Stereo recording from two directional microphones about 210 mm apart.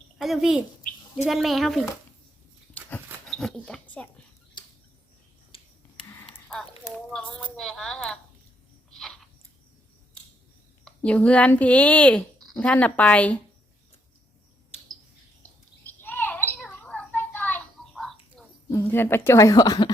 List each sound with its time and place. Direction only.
0.2 s a child's voice: centre (ahead or behind)
3.2 s speech: 5° left (ahead or behind)
4.6 s a sound: 20° left (ahead or behind)
6.5 s speech: 5° left (ahead or behind)
8.9 s chewing: centre (ahead or behind)
10.8 s speech: 5° left (ahead or behind)
15.9 s bird: 10° left (ahead or behind)
18.7 s speech: 15° left (ahead or behind)